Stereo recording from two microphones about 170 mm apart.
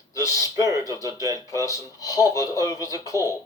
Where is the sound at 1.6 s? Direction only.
20° left (ahead or behind).